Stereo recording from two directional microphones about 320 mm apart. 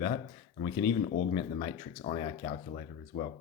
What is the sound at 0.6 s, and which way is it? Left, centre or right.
Speech, centre.